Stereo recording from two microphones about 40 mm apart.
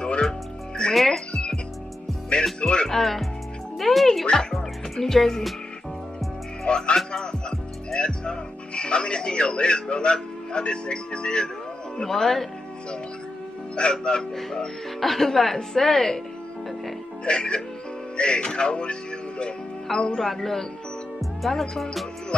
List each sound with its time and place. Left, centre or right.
0.0 s music: centre
0.9 s music: centre
2.6 s music: left
2.9 s speech: centre
3.7 s music: centre
4.3 s music: centre
6.6 s music: left
12.0 s speech: centre
13.7 s speech: left
14.3 s speech: centre
15.0 s speech: centre
17.2 s speech: left
20.2 s speech: centre